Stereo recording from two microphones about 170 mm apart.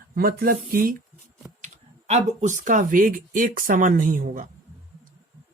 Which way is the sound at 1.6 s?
45° right (ahead or behind).